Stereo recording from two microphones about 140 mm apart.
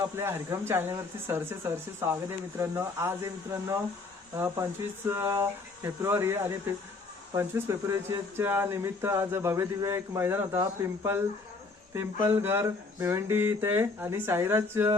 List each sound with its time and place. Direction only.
0.2 s speech: 20° right (ahead or behind)